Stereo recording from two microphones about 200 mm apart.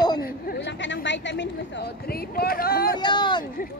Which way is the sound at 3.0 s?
20° left (ahead or behind).